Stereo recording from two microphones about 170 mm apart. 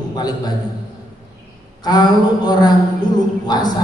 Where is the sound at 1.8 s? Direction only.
25° left (ahead or behind).